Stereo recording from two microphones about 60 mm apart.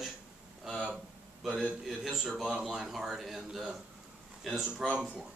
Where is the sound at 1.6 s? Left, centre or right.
Centre.